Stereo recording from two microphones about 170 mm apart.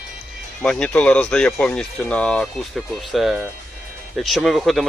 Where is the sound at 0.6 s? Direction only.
5° left (ahead or behind).